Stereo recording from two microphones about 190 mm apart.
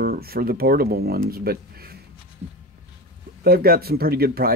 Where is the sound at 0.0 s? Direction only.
55° right (ahead or behind).